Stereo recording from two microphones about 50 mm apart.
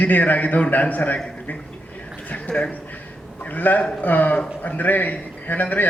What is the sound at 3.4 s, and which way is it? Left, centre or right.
A man's voice, left.